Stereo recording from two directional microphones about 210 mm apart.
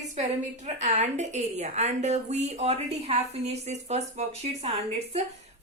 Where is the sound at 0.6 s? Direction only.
35° right (ahead or behind).